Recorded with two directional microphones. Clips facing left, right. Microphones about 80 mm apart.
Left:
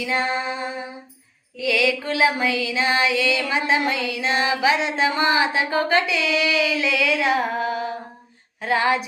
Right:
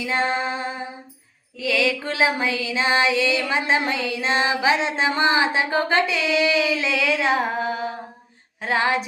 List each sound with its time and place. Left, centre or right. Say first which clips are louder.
0.0 s music: right 1 dB; right
1.6 s music: left 1 dB; right